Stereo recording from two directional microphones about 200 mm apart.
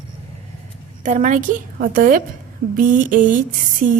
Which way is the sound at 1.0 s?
40° right (ahead or behind).